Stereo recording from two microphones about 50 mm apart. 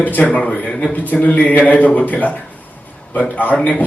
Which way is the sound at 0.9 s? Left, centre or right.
Left.